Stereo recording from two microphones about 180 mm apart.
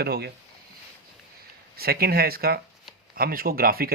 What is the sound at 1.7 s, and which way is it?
Speech, 60° right (ahead or behind).